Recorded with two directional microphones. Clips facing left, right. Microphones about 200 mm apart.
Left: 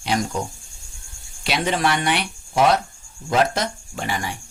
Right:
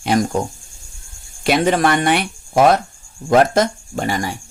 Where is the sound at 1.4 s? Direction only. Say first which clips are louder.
Right 7 dB; 50° right (ahead or behind).